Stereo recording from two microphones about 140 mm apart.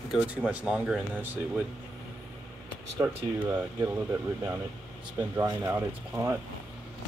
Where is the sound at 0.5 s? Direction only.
5° right (ahead or behind).